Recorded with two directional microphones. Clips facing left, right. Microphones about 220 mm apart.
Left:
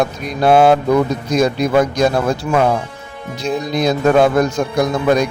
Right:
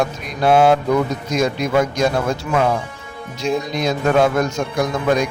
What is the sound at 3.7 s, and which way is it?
A man's voice, 35° left (ahead or behind).